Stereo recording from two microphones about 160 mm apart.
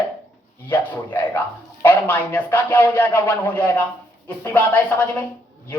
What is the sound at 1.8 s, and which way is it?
Speech, 10° left (ahead or behind).